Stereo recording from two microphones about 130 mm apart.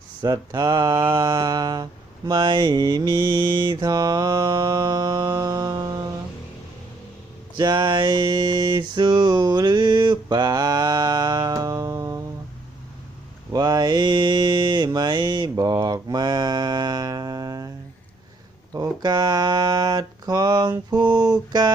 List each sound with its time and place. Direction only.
0.2 s mantra: 35° right (ahead or behind)
7.5 s a sound: 35° right (ahead or behind)
13.5 s mantra: 30° right (ahead or behind)
18.7 s speech: 30° right (ahead or behind)